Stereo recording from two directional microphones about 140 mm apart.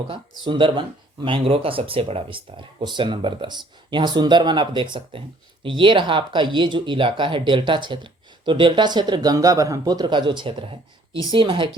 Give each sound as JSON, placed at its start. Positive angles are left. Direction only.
{"t": 0.1, "sound": "speech", "side_deg": -35}